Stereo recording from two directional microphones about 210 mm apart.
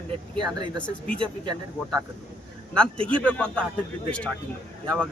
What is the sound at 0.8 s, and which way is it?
Speech, 5° left (ahead or behind).